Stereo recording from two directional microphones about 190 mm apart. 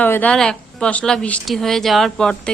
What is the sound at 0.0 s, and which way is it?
Speech, 10° left (ahead or behind).